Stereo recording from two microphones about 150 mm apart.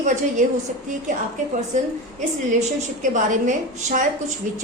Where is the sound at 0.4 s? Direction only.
55° right (ahead or behind).